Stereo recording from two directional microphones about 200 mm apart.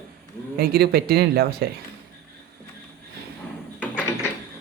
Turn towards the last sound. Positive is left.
turn(degrees=10)  # may be behind; listen again after turning